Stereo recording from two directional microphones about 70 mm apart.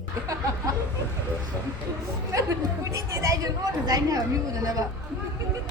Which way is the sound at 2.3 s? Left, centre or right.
Right.